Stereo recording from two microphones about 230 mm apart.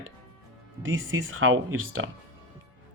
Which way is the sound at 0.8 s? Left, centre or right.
Right.